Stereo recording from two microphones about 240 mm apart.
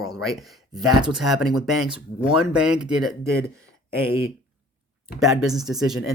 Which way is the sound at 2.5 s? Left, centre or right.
Centre.